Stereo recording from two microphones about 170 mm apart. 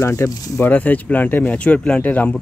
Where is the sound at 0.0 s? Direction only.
15° left (ahead or behind).